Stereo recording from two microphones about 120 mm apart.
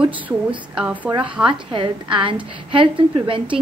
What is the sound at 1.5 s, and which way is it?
Speech, 45° right (ahead or behind).